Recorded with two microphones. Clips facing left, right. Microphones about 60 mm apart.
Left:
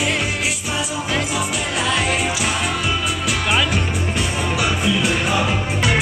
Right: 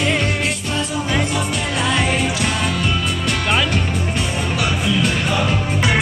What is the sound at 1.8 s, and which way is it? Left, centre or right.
Music, centre.